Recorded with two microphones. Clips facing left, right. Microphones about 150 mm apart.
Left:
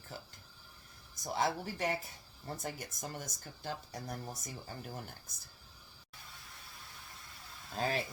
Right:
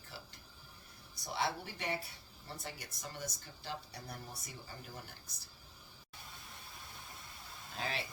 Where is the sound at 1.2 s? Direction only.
45° left (ahead or behind).